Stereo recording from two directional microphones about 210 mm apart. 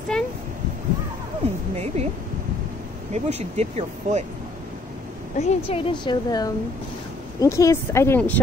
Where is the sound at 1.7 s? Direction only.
30° right (ahead or behind).